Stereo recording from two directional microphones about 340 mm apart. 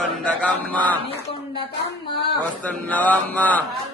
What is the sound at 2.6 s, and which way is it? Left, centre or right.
Speech, centre.